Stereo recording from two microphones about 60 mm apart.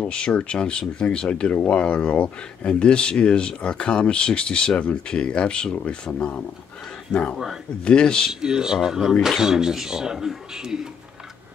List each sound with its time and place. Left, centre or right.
0.0 s speech: centre
8.3 s speech: centre